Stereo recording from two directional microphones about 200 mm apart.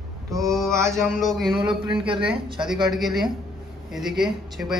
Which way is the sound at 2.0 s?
25° right (ahead or behind).